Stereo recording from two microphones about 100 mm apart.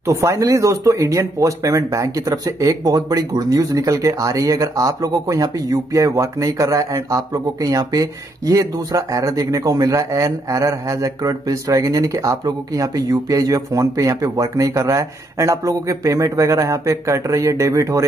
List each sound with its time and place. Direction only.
0.0 s speech: 30° right (ahead or behind)